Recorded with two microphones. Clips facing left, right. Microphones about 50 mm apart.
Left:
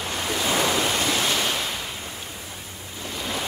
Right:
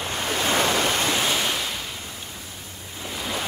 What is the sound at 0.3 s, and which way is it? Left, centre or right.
Waves, right.